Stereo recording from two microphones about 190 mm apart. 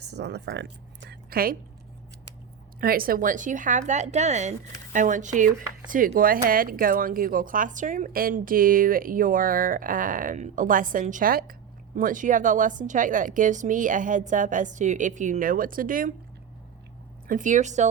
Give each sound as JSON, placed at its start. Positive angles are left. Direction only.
{"t": 0.0, "sound": "speech", "side_deg": -60}
{"t": 2.8, "sound": "speech", "side_deg": -50}
{"t": 17.2, "sound": "speech", "side_deg": -45}